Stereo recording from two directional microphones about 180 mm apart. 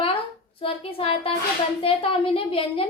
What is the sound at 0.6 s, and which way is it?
A woman's voice, 30° left (ahead or behind).